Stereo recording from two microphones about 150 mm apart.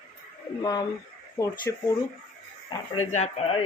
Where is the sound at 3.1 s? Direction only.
50° left (ahead or behind).